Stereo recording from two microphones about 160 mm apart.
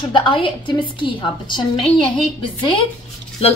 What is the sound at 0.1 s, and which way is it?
Speech, 30° left (ahead or behind).